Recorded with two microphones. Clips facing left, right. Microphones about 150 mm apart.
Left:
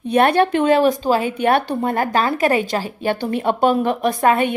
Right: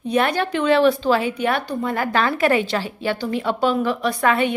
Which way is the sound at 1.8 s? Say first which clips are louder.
Left 2 dB; 45° left (ahead or behind).